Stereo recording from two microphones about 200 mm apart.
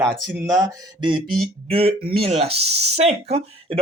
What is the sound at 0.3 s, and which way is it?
A man's voice, 20° right (ahead or behind).